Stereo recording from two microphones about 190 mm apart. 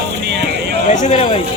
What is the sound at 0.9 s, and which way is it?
Speech, 40° left (ahead or behind).